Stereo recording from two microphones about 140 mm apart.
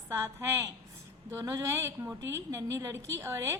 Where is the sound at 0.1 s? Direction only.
20° right (ahead or behind).